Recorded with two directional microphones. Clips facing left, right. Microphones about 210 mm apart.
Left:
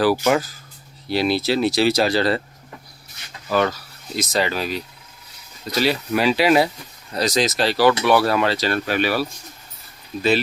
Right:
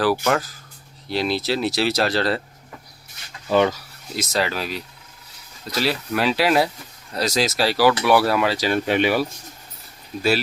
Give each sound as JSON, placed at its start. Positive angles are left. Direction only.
{"t": 0.0, "sound": "speech", "side_deg": 5}
{"t": 3.5, "sound": "speech", "side_deg": -15}
{"t": 4.1, "sound": "speech", "side_deg": 0}